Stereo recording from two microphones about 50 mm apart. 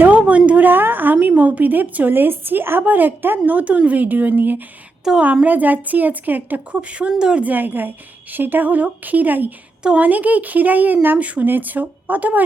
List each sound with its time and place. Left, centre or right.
0.0 s a sound: right
0.7 s a woman's voice: right
7.2 s a woman's voice: centre
7.4 s a woman's voice: right
11.2 s speech: right
11.4 s a woman's voice: right